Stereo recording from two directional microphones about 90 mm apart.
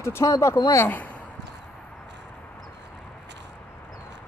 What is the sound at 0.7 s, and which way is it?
Speech, 20° left (ahead or behind).